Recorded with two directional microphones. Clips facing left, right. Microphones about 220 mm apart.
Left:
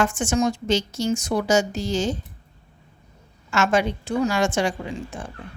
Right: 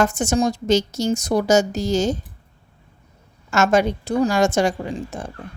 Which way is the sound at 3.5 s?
40° right (ahead or behind).